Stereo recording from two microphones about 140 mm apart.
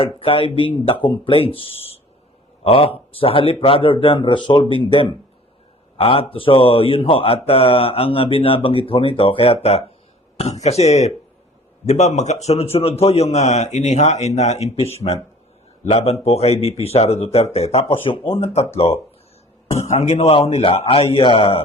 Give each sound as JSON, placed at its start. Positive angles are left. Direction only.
{"t": 0.0, "sound": "a man's voice", "side_deg": 40}